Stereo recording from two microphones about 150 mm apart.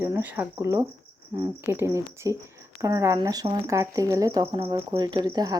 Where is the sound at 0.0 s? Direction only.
15° right (ahead or behind).